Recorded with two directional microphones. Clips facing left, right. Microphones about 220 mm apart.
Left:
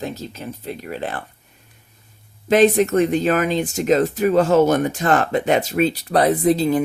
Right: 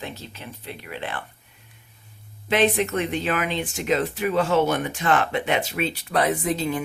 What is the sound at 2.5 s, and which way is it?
Speech, 40° left (ahead or behind).